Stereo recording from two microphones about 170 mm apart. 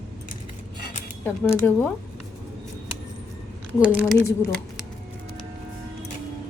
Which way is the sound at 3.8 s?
10° right (ahead or behind).